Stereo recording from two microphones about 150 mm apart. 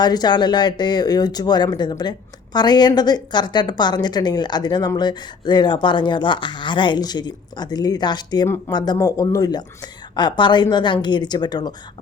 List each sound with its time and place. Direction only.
0.0 s speech: 25° left (ahead or behind)
8.4 s speech: 15° left (ahead or behind)
8.7 s speech: 30° left (ahead or behind)